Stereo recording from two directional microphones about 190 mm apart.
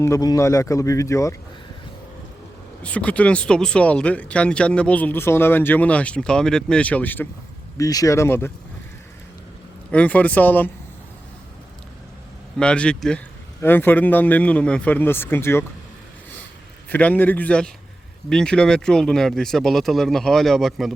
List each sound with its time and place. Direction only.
0.0 s speech: 15° left (ahead or behind)
2.8 s speech: 5° left (ahead or behind)
9.9 s speech: 5° left (ahead or behind)
12.5 s speech: 5° left (ahead or behind)
16.9 s speech: 10° left (ahead or behind)